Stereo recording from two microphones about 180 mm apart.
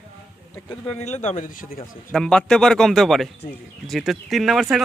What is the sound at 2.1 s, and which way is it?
Speech, 5° left (ahead or behind).